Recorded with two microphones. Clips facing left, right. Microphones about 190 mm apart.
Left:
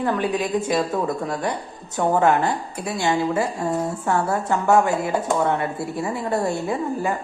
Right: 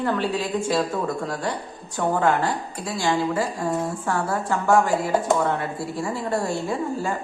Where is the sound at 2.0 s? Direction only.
20° left (ahead or behind).